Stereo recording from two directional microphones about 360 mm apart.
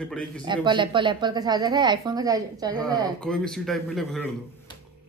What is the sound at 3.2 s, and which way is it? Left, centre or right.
A man's voice, centre.